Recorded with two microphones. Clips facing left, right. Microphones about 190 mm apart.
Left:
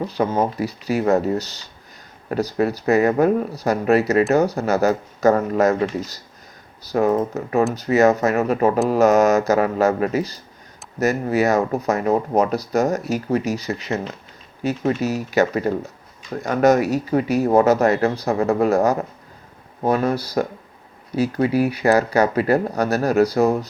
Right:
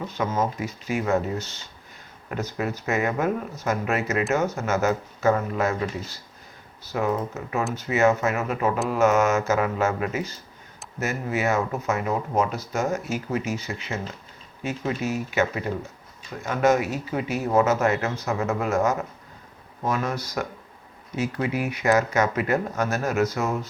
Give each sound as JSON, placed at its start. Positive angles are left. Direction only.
{"t": 0.0, "sound": "speech", "side_deg": 35}